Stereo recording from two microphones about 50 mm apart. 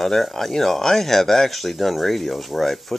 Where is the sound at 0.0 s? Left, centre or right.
Centre.